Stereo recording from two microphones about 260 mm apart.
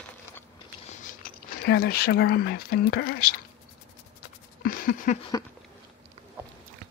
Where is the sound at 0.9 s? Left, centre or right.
Left.